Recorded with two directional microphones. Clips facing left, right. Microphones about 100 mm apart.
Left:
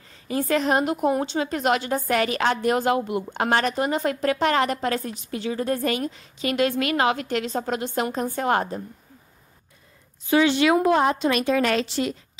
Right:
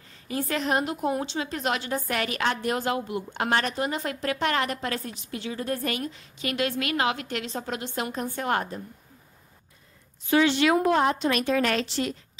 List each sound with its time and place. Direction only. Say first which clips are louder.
0.5 s a woman's voice: left 5 dB; 40° left (ahead or behind)
2.0 s a woman's voice: left 6 dB; 30° left (ahead or behind)
2.7 s a woman's voice: left 5 dB; 55° left (ahead or behind)
3.3 s a woman's voice: left 3 dB; 40° left (ahead or behind)
6.5 s a woman's voice: left 5 dB; 40° left (ahead or behind)
10.3 s a woman's voice: left 2 dB; 15° left (ahead or behind)